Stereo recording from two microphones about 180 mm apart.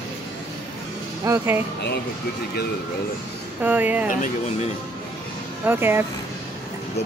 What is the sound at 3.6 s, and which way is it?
Speech, 10° right (ahead or behind).